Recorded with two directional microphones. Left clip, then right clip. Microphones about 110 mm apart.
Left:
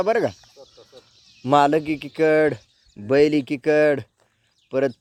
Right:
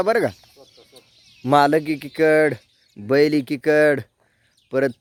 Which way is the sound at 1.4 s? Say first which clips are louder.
Right 1 dB; 40° right (ahead or behind).